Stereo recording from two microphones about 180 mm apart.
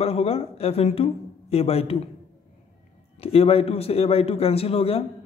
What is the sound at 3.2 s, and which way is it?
A man's voice, 35° left (ahead or behind).